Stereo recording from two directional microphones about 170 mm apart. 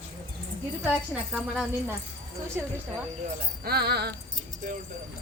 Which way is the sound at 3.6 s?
70° right (ahead or behind).